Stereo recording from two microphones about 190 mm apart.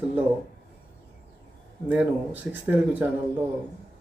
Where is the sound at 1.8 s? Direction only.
10° right (ahead or behind).